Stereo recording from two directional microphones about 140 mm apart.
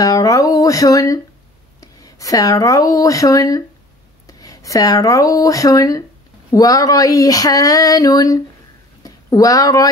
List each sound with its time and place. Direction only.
0.0 s speech: 25° left (ahead or behind)
6.5 s a sound: 25° left (ahead or behind)
9.0 s speech: 25° left (ahead or behind)